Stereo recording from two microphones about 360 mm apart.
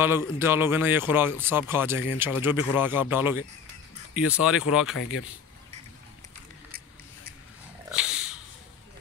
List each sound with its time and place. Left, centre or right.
0.0 s speech: centre
4.9 s speech: left